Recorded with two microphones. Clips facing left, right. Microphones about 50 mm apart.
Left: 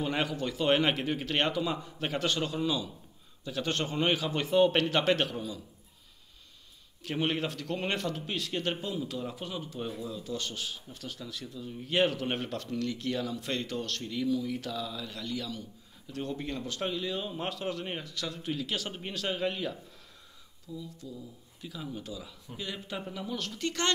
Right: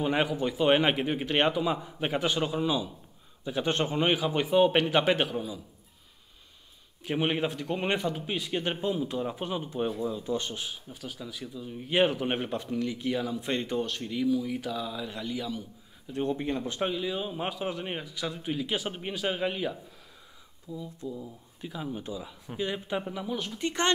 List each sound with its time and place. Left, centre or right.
0.0 s speech: centre
7.0 s speech: centre
16.9 s speech: centre